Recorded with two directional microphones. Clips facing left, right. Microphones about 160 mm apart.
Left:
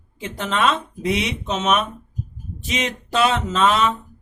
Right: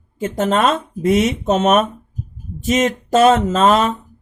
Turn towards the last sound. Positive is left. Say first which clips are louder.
# right 4 dB
turn(degrees=-45)  # may be behind; listen again after turning